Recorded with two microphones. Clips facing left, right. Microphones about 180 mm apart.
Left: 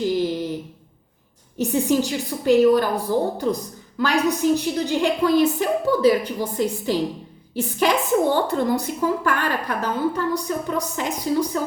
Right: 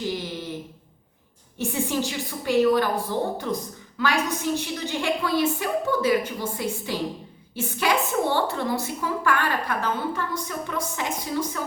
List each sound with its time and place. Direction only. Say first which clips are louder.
1.5 s a woman's voice: left 6 dB; 40° left (ahead or behind)